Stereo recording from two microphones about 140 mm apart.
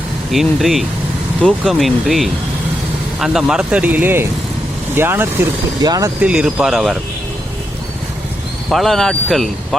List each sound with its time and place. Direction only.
0.3 s speech: centre (ahead or behind); by 6.1 s 25° right (ahead or behind)
6.2 s speech: 5° right (ahead or behind)
8.7 s speech: centre (ahead or behind)